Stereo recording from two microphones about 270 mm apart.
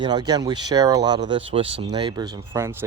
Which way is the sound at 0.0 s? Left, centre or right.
Centre.